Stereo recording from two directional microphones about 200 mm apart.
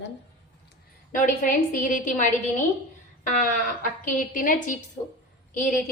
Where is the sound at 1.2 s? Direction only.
40° left (ahead or behind).